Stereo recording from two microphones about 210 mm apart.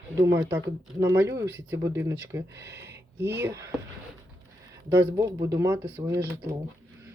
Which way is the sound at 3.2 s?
10° right (ahead or behind).